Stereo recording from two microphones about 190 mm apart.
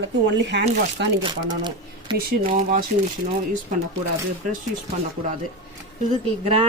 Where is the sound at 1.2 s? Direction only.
25° right (ahead or behind).